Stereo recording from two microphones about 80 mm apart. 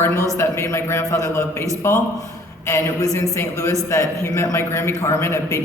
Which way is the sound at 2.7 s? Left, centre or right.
Left.